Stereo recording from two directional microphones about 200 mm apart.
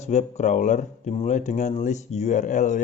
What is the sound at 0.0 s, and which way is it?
Speech, 35° left (ahead or behind).